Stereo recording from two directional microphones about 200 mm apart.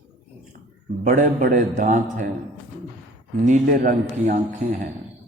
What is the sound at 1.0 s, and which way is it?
A man's voice, 40° right (ahead or behind).